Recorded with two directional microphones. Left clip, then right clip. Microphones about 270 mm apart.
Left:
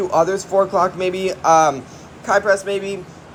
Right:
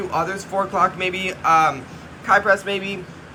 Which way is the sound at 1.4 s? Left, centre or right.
Centre.